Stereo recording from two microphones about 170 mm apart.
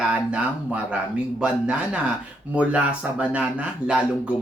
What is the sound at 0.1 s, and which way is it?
Speech, 5° right (ahead or behind).